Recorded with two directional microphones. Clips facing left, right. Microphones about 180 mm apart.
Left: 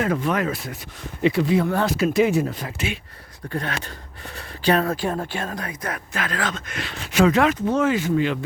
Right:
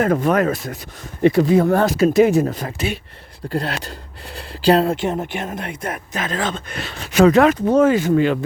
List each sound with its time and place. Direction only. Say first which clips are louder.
0.0 s speech: right 6 dB; 45° right (ahead or behind)